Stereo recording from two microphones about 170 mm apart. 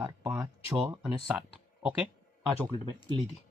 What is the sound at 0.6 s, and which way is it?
Speech, 5° right (ahead or behind).